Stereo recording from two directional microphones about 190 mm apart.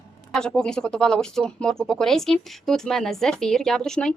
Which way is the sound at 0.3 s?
5° left (ahead or behind).